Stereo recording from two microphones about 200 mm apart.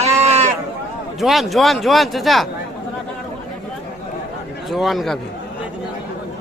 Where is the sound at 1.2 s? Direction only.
Centre (ahead or behind).